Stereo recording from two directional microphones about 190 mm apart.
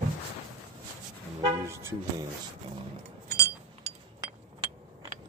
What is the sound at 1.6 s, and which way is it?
Speech, 15° right (ahead or behind).